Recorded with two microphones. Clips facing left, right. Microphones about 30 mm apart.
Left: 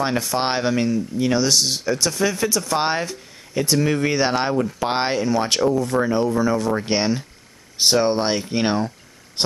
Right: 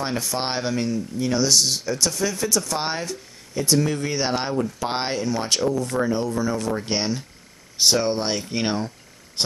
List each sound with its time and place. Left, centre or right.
0.0 s speech: centre